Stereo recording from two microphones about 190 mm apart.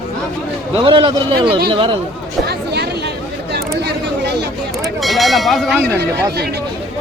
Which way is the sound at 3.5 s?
60° right (ahead or behind).